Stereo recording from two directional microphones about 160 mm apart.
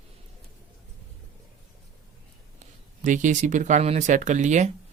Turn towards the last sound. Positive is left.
turn(degrees=-50)  # may be behind; listen again after turning